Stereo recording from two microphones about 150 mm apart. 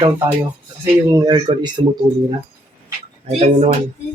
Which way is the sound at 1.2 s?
30° right (ahead or behind).